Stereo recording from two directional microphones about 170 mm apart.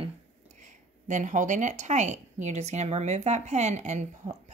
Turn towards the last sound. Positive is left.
turn(degrees=-40)  # may be behind; listen again after turning